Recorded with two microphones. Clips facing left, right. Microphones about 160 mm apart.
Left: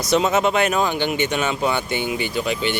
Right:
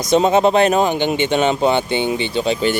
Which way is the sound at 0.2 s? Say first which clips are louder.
Right 8 dB; 35° right (ahead or behind).